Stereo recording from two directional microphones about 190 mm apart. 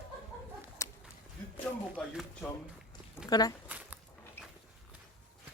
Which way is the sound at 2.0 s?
5° left (ahead or behind).